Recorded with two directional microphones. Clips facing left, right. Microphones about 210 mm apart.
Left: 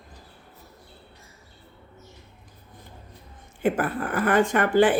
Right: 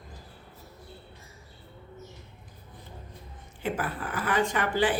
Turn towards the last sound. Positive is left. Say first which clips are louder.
# left 7 dB
turn(degrees=50)  # may be behind; listen again after turning